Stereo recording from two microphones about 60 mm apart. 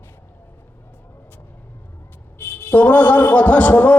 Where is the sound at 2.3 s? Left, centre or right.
Left.